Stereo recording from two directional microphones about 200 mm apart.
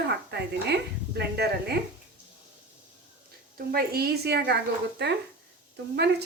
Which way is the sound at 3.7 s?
50° right (ahead or behind).